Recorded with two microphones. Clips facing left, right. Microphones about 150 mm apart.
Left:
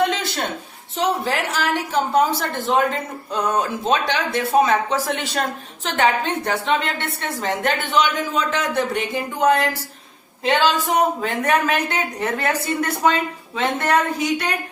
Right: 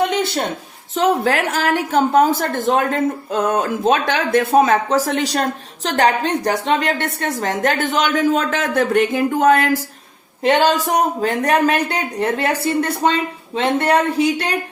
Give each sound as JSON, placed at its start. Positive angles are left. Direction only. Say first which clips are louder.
{"t": 0.9, "sound": "a woman's voice", "louder": "right 5 dB", "side_deg": -50}